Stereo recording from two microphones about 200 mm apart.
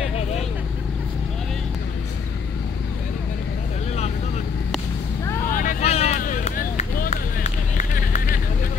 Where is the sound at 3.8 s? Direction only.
35° left (ahead or behind).